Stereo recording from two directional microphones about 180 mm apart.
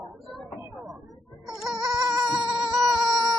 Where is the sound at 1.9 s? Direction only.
Centre (ahead or behind).